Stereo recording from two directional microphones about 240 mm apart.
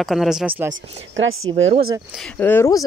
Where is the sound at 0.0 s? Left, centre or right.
Centre.